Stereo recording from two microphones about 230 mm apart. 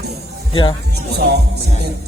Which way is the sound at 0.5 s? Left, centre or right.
Centre.